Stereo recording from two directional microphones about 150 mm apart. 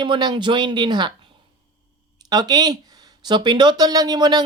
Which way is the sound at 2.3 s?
30° right (ahead or behind).